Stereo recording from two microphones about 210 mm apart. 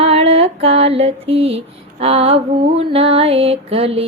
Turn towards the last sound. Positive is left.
turn(degrees=-25)  # may be behind; listen again after turning